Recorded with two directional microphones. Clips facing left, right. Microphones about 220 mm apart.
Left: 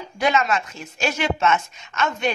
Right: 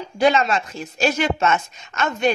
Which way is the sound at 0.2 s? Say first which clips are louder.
Right 3 dB; 30° right (ahead or behind).